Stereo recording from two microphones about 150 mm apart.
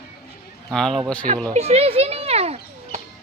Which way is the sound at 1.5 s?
45° right (ahead or behind).